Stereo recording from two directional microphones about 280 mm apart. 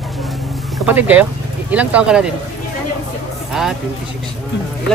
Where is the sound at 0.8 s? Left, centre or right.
Centre.